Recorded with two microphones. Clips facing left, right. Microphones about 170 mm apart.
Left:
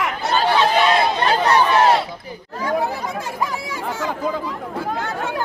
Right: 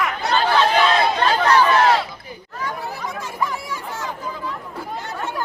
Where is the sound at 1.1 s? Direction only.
20° left (ahead or behind).